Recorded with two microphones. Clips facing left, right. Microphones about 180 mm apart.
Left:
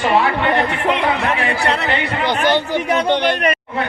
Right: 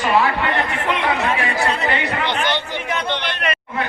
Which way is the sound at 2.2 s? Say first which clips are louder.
Left 5 dB; 40° left (ahead or behind).